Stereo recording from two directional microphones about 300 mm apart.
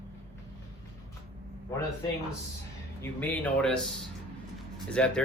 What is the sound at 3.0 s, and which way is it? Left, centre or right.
Speech, centre.